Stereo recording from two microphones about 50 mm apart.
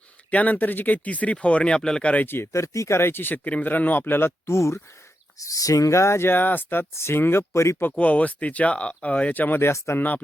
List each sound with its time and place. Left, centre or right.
0.3 s speech: left
2.2 s speech: left
2.5 s speech: left
5.4 s speech: left
5.9 s speech: left
6.2 s speech: left
6.9 s speech: left
7.5 s speech: left
7.9 s speech: left
9.6 s speech: left